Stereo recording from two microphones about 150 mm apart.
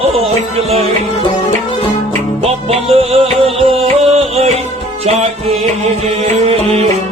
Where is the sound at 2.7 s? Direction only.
40° right (ahead or behind).